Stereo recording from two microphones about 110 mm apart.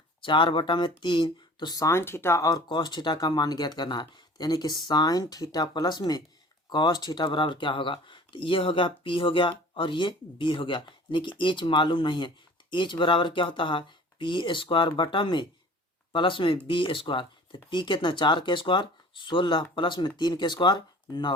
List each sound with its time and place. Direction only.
0.2 s speech: 50° left (ahead or behind); by 2.6 s 30° left (ahead or behind)
2.6 s speech: 40° left (ahead or behind)